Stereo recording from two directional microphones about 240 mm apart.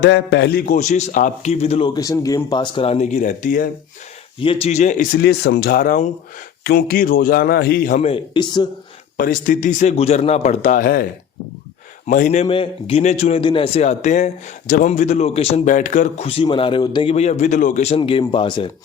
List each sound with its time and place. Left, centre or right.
0.0 s a man's voice: left; by 8.6 s centre
9.1 s a man's voice: left
12.0 s a man's voice: left